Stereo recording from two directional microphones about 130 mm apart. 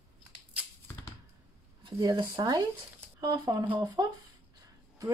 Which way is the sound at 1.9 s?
30° right (ahead or behind).